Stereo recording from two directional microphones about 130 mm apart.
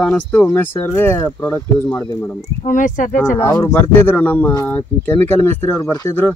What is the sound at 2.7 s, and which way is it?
Speech, 75° left (ahead or behind).